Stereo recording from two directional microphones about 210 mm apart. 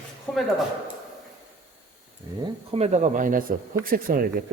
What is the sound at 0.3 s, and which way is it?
Speech, 5° left (ahead or behind).